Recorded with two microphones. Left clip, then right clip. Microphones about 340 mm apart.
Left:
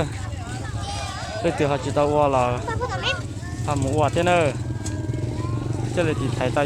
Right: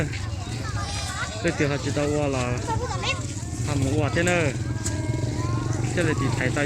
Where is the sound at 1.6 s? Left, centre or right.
Centre.